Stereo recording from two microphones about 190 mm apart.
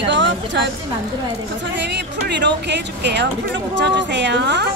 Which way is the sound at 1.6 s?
65° right (ahead or behind).